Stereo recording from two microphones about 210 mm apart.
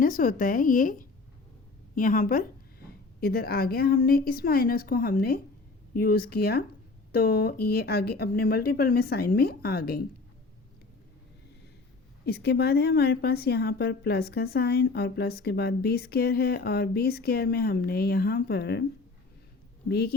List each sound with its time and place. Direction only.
0.0 s a woman's voice: 40° left (ahead or behind)
12.2 s a woman's voice: 50° left (ahead or behind)
19.9 s a woman's voice: 50° left (ahead or behind)